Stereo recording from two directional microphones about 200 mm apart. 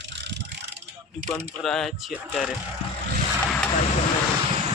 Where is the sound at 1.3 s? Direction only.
Centre (ahead or behind).